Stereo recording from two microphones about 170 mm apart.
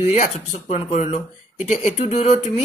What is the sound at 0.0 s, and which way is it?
Speech, 40° left (ahead or behind).